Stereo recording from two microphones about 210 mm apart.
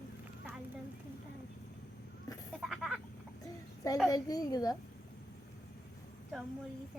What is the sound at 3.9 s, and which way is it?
Speech, 15° left (ahead or behind).